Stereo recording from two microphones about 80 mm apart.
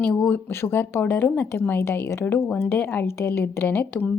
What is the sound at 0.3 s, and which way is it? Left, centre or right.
Speech, left.